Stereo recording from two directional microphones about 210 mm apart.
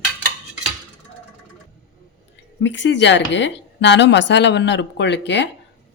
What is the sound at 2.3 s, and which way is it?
A woman's voice, 60° left (ahead or behind).